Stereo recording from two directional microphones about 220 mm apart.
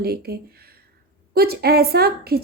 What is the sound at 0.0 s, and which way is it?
A woman's voice, 45° right (ahead or behind).